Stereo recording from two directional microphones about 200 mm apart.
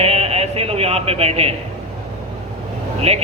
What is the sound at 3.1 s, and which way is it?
Speech, 30° right (ahead or behind).